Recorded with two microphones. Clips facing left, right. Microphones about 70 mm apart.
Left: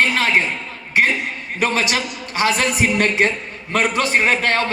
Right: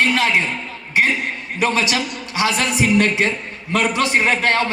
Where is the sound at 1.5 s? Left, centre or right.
Left.